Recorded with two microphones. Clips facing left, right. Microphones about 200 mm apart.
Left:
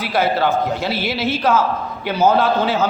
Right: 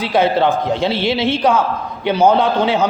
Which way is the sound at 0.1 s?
20° right (ahead or behind).